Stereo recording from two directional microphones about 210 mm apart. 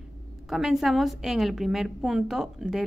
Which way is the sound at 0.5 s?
Centre (ahead or behind).